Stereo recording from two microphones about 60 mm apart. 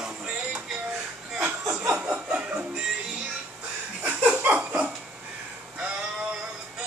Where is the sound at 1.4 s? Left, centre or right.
Centre.